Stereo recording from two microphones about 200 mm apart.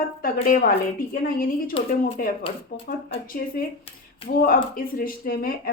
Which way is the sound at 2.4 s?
25° left (ahead or behind).